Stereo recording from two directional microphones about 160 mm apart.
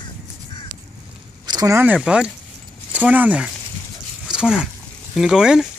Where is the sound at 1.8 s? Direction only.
10° right (ahead or behind).